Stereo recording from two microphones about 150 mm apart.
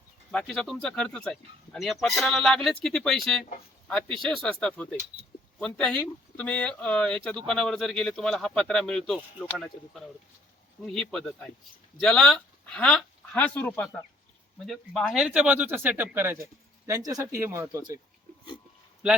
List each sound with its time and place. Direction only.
0.3 s speech: 5° left (ahead or behind)
14.7 s speech: centre (ahead or behind); by 18.0 s 20° right (ahead or behind)